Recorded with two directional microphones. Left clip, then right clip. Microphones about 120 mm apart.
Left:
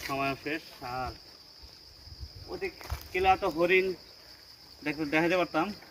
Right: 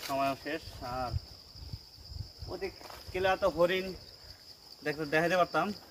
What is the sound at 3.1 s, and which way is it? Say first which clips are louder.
Speech: left 3 dB; 30° right (ahead or behind).